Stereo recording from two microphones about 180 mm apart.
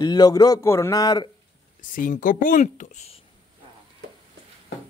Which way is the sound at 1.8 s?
50° left (ahead or behind).